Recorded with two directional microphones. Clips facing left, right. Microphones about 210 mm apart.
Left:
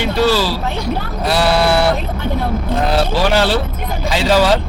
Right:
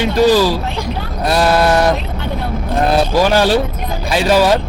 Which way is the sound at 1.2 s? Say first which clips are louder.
Right 2 dB; 10° left (ahead or behind).